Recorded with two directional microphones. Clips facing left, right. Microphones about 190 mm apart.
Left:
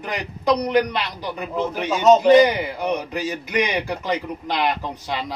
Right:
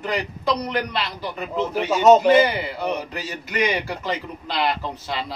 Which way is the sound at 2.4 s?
15° left (ahead or behind).